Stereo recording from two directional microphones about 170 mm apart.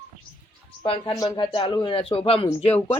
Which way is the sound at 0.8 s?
30° left (ahead or behind).